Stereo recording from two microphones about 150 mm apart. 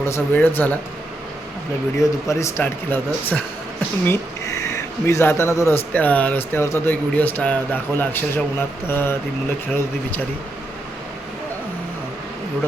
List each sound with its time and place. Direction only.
0.0 s speech: 15° left (ahead or behind)
2.0 s speech: 20° left (ahead or behind)